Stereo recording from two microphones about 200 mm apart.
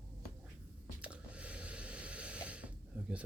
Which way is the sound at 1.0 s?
5° right (ahead or behind).